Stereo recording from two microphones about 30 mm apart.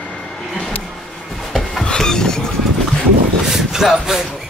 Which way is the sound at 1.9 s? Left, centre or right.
Left.